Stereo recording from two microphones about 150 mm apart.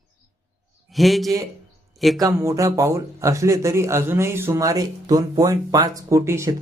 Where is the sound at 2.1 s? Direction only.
20° right (ahead or behind).